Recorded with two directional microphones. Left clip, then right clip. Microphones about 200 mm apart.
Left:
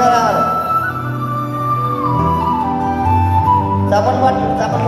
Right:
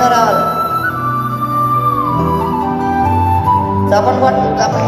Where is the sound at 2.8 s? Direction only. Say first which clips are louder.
Right 2 dB; 45° right (ahead or behind).